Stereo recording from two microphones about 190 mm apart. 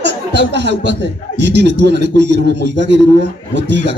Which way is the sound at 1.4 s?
65° right (ahead or behind).